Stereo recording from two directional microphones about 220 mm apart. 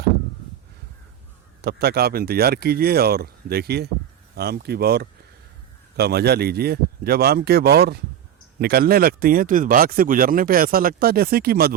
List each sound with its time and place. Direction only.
1.6 s speech: 45° right (ahead or behind)